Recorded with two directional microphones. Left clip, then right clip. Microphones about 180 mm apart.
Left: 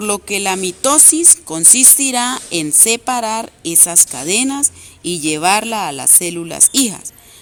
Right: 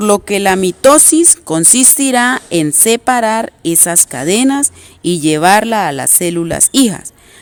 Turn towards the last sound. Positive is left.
turn(degrees=-50)  # may be behind; listen again after turning